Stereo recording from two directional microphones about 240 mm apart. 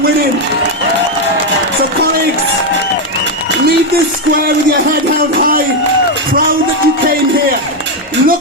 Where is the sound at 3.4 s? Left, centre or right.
Right.